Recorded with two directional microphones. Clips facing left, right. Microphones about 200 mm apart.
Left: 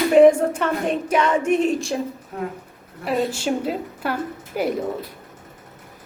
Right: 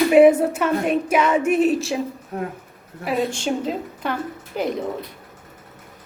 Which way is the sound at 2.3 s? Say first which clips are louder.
Right 1 dB; 40° right (ahead or behind).